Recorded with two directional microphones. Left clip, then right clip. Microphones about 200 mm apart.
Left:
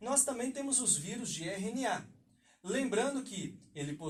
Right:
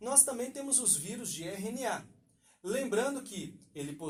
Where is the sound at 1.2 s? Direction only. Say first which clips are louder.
Even; 45° right (ahead or behind).